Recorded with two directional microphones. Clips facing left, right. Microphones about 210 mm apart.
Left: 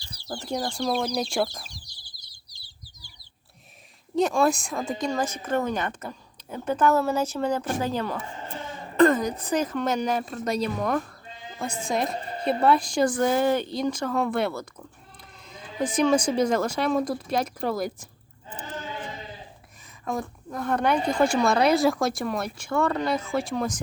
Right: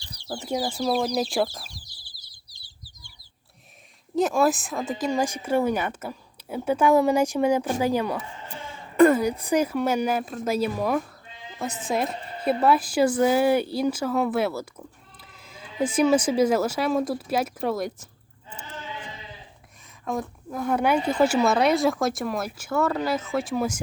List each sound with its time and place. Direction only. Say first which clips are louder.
0.0 s chicken: right 1 dB; centre (ahead or behind)
4.1 s a woman's voice: right 1 dB; centre (ahead or behind)
18.8 s sheep: left 2 dB; 40° left (ahead or behind)
20.1 s speech: right 1 dB; centre (ahead or behind)